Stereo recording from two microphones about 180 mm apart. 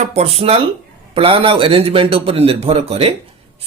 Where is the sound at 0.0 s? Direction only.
35° right (ahead or behind).